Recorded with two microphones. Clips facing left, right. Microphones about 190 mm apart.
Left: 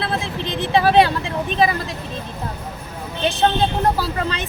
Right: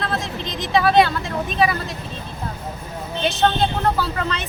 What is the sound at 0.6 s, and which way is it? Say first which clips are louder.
Speech: left 1 dB; 30° left (ahead or behind).